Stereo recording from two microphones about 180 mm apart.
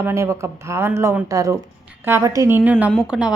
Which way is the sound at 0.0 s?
15° right (ahead or behind).